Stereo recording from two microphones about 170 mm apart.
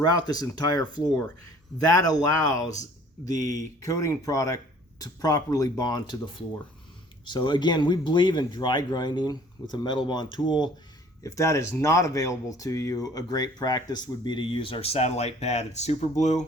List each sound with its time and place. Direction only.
0.0 s speech: 25° left (ahead or behind); by 16.4 s 40° left (ahead or behind)